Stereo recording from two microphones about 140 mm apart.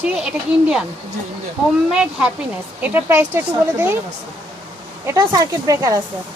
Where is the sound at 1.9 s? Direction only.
5° right (ahead or behind).